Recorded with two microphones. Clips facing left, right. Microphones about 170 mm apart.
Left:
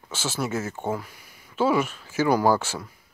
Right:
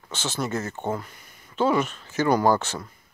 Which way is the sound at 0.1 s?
5° left (ahead or behind).